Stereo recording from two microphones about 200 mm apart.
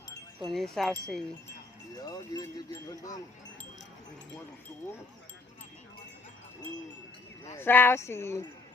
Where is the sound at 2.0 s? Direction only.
20° left (ahead or behind).